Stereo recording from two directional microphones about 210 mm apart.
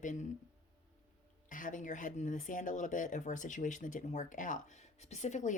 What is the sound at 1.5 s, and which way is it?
Speech, 40° left (ahead or behind).